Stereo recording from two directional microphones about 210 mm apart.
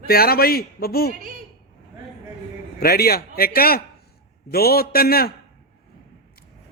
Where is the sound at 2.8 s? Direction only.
45° left (ahead or behind).